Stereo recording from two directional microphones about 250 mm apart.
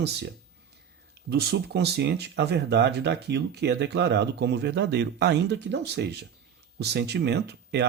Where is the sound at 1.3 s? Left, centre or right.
Right.